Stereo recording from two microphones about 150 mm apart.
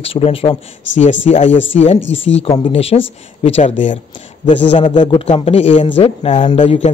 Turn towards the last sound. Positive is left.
turn(degrees=45)  # may be behind; listen again after turning